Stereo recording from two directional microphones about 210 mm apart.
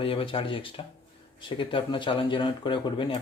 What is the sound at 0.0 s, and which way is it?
Speech, 25° left (ahead or behind).